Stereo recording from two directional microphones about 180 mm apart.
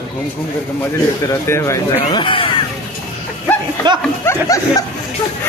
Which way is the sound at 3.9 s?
25° right (ahead or behind).